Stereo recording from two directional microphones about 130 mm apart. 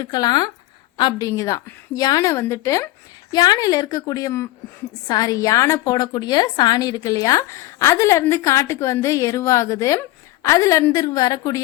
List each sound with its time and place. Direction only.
0.0 s a woman's voice: 30° left (ahead or behind)